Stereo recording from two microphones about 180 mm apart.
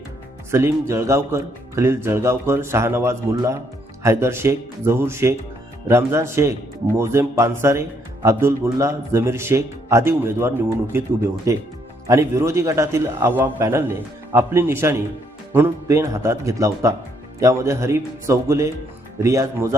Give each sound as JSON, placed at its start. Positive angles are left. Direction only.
{"t": 0.5, "sound": "speech", "side_deg": -15}